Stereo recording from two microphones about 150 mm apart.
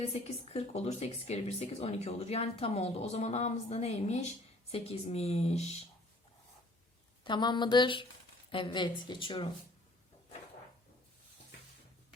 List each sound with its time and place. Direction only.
0.1 s speech: 40° left (ahead or behind)
7.3 s a woman's voice: 30° left (ahead or behind)